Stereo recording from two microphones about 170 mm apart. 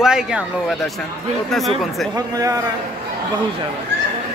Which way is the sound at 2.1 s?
20° right (ahead or behind).